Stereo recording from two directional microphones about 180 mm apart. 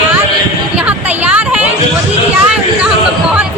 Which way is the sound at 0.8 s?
10° right (ahead or behind).